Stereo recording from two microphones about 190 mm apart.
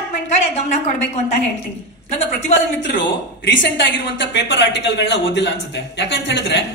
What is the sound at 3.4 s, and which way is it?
A woman's voice, 65° left (ahead or behind).